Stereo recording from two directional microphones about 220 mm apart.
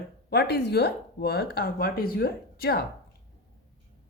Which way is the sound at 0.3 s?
45° left (ahead or behind).